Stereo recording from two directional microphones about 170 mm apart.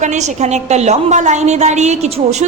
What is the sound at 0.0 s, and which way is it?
A woman's voice, 45° right (ahead or behind).